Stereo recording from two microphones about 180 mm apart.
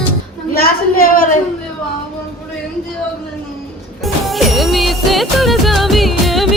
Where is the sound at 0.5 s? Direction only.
55° left (ahead or behind).